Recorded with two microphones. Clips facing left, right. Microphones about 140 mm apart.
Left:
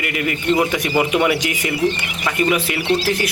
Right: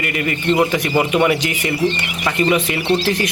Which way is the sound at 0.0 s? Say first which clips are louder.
Right 1 dB; 5° left (ahead or behind).